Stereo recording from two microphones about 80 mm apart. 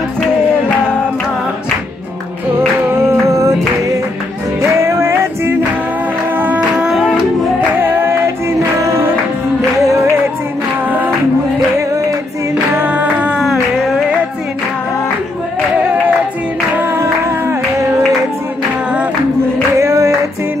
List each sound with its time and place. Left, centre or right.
3.3 s music: right
6.9 s music: centre
7.8 s music: right
12.7 s a sound: right
19.8 s music: right